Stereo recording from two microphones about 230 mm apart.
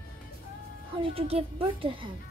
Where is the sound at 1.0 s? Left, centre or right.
Right.